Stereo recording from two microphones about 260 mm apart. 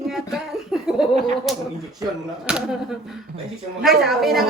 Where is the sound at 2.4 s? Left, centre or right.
Centre.